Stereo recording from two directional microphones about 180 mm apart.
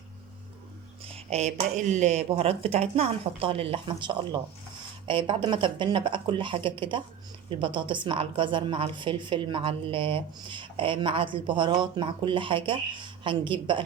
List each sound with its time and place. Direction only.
1.0 s a woman's voice: 35° right (ahead or behind)